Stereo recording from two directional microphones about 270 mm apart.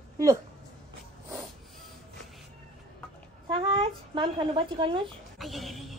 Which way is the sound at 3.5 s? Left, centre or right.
Centre.